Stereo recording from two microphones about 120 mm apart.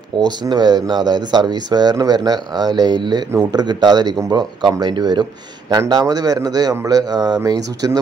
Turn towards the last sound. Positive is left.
turn(degrees=-30)  # may be behind; listen again after turning